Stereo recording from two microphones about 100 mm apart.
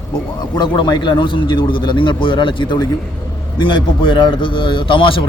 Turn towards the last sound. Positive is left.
turn(degrees=60)  # may be behind; listen again after turning